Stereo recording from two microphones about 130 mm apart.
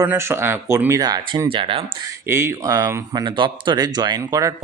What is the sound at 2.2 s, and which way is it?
Speech, 20° right (ahead or behind).